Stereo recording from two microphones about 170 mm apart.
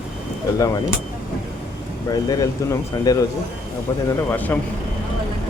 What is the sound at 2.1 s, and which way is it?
Speech, 20° left (ahead or behind).